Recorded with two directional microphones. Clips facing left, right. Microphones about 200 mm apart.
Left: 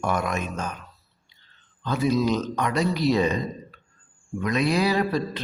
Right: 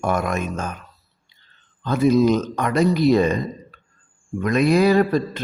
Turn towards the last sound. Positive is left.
turn(degrees=-50)  # may be behind; listen again after turning